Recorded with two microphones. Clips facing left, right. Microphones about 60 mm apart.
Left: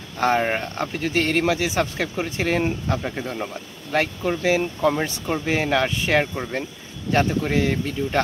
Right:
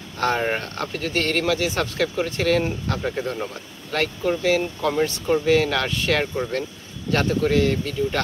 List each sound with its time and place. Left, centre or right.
0.2 s speech: centre
3.0 s speech: centre